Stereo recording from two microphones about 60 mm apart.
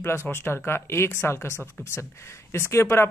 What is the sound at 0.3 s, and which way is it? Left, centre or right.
Speech, left.